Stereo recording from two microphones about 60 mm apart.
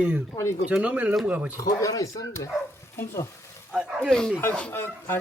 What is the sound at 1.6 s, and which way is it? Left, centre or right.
Speech, left.